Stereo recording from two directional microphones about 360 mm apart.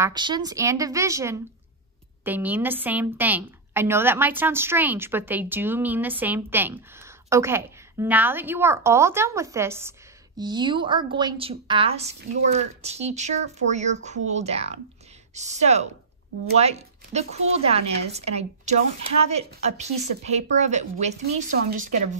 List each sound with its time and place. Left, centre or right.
0.0 s a woman's voice: centre